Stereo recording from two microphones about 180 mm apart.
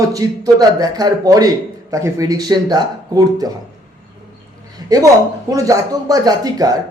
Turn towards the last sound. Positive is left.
turn(degrees=-20)  # may be behind; listen again after turning